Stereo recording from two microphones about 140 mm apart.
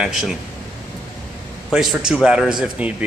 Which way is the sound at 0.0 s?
5° right (ahead or behind).